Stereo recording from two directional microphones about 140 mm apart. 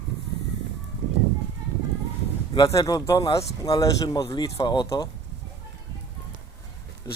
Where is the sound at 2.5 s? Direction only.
25° left (ahead or behind).